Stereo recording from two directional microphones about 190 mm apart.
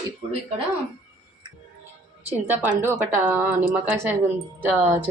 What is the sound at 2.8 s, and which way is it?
Speech, 15° right (ahead or behind).